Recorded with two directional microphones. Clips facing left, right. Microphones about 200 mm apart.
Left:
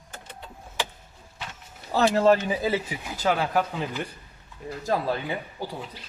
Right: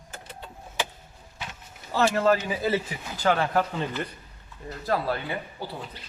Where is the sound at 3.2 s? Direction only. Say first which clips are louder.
Right 1 dB; 5° left (ahead or behind).